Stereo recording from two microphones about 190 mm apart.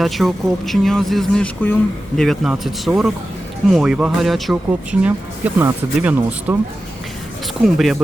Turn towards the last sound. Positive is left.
turn(degrees=0)  # may be behind; listen again after turning